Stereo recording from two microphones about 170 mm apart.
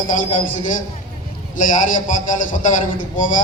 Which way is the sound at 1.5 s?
50° left (ahead or behind).